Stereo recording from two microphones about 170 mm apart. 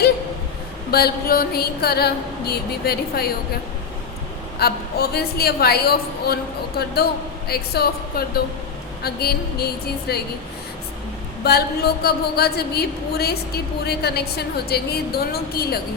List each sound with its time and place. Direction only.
0.9 s a woman's voice: 65° left (ahead or behind)
4.5 s a woman's voice: 70° left (ahead or behind)
11.4 s a woman's voice: 70° left (ahead or behind)